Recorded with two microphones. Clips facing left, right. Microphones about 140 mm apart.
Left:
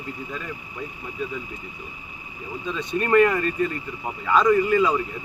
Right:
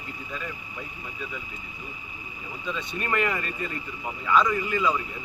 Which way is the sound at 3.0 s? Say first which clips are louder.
Left 10 dB; 40° left (ahead or behind).